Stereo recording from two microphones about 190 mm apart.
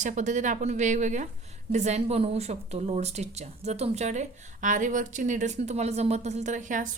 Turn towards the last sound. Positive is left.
turn(degrees=-40)  # may be behind; listen again after turning